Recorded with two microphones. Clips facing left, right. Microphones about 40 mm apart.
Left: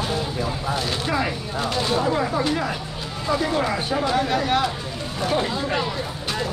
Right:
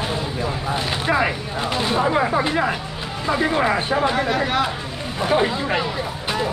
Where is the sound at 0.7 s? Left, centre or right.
Right.